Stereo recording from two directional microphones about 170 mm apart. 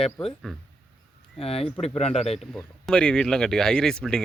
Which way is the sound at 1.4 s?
35° left (ahead or behind).